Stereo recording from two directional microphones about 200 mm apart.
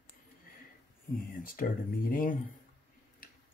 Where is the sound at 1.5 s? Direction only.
45° left (ahead or behind).